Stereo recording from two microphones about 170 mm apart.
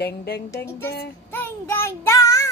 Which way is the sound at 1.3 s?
15° left (ahead or behind).